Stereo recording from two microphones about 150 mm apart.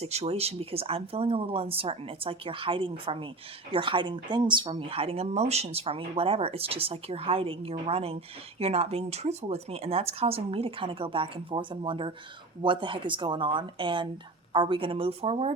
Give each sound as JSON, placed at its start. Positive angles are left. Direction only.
{"t": 0.0, "sound": "speech", "side_deg": -45}